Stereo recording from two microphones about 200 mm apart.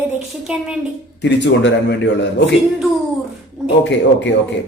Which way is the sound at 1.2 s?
60° left (ahead or behind).